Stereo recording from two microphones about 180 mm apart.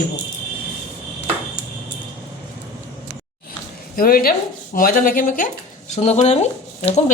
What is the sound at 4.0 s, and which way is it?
Speech, 55° left (ahead or behind).